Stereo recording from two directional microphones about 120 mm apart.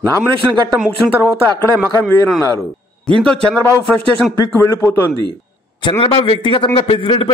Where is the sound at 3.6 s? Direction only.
20° left (ahead or behind).